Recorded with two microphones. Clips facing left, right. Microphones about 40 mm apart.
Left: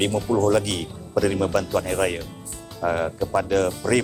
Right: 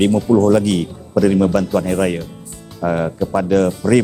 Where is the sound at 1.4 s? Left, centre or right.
Right.